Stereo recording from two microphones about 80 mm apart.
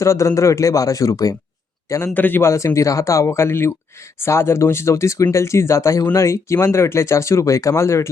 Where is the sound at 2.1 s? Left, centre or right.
Left.